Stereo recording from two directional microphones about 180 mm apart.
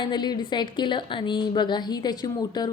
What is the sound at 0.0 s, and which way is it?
A woman's voice, 25° left (ahead or behind).